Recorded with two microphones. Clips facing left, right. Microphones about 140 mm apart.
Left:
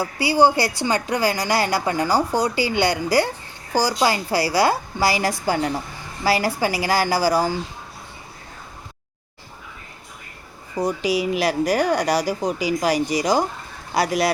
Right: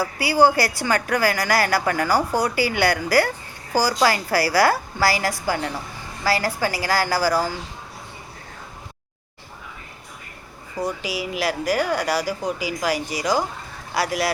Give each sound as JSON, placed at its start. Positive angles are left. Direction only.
{"t": 0.0, "sound": "a woman's voice", "side_deg": 25}
{"t": 10.8, "sound": "a woman's voice", "side_deg": 15}